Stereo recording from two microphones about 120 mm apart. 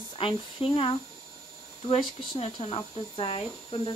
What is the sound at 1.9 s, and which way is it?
Speech, 55° left (ahead or behind).